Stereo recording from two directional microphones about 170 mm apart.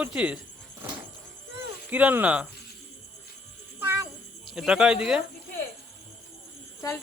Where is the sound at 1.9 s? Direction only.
10° right (ahead or behind).